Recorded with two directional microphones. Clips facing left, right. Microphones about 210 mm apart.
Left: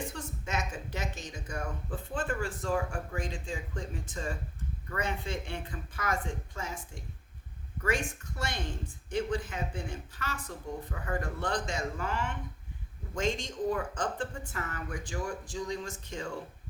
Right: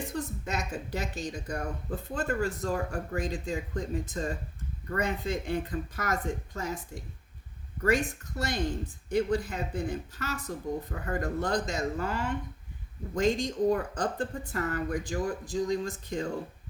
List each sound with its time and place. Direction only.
0.2 s a woman's voice: 35° right (ahead or behind)
7.8 s speech: 40° right (ahead or behind)